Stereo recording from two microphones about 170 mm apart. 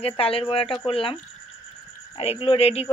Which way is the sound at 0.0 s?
35° left (ahead or behind).